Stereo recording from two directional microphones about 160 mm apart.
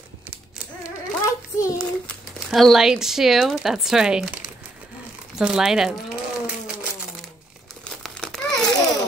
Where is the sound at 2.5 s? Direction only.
Centre (ahead or behind).